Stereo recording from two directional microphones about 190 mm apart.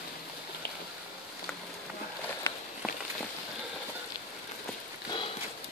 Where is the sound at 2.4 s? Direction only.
15° left (ahead or behind).